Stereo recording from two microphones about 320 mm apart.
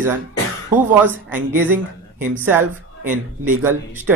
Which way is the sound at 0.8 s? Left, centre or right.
Centre.